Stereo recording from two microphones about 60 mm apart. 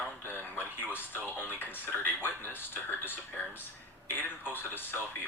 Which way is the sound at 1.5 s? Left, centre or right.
Left.